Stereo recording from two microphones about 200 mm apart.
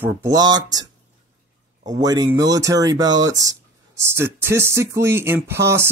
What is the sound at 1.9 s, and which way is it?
Speech, 20° right (ahead or behind).